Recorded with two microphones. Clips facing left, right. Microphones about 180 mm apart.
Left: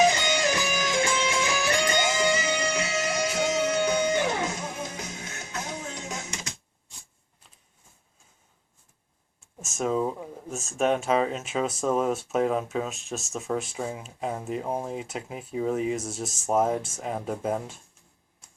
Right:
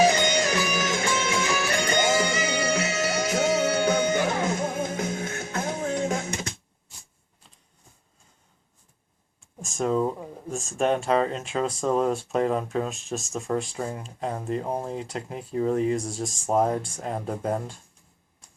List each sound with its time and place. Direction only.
0.3 s music: 50° right (ahead or behind)
9.6 s speech: 5° left (ahead or behind)